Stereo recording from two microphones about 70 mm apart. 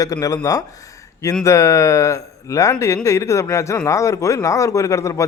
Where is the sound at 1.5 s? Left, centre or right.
Left.